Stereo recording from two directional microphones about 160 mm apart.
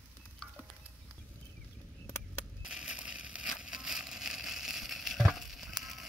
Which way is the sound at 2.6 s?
5° right (ahead or behind).